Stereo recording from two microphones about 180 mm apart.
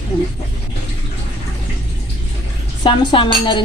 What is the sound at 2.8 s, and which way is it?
Speech, 25° left (ahead or behind).